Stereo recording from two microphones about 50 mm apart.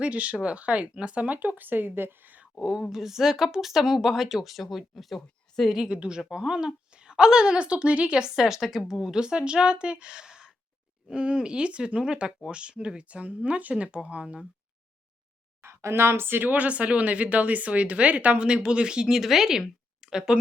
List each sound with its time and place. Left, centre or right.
0.0 s speech: right
2.6 s speech: centre
5.9 s speech: centre
8.4 s a woman's voice: centre
15.6 s speech: right; by 20.4 s centre